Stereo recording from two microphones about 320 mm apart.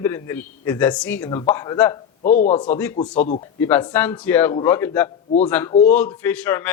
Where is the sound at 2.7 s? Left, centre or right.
Centre.